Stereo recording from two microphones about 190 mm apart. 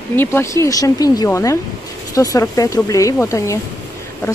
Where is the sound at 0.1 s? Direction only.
10° left (ahead or behind).